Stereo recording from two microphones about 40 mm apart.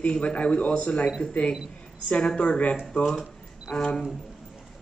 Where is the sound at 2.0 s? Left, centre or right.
Left.